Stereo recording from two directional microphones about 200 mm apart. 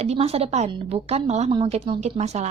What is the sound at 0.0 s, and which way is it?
A woman's voice, 30° right (ahead or behind).